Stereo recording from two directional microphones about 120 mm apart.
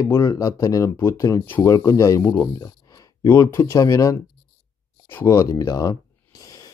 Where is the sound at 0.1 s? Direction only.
30° left (ahead or behind).